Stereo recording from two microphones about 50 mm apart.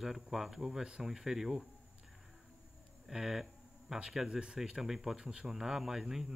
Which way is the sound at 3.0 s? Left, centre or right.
Centre.